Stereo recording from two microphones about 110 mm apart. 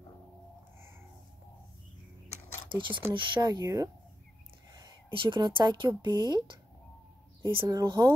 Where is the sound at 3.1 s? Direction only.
45° right (ahead or behind).